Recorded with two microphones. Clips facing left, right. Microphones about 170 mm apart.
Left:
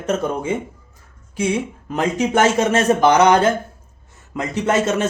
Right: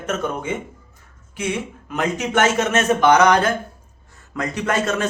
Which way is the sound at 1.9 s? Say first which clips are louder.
Left 3 dB; 30° left (ahead or behind).